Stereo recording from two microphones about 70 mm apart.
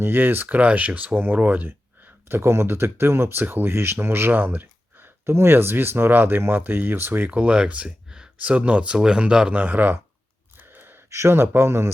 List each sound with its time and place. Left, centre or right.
0.0 s speech: right
7.3 s speech: centre
10.6 s gasp: right
11.1 s speech: right